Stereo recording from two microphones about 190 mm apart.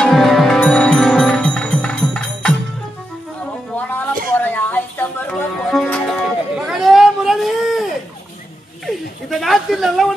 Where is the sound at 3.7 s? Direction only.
10° left (ahead or behind).